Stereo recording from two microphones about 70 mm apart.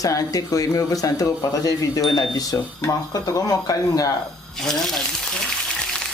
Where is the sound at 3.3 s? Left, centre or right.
Left.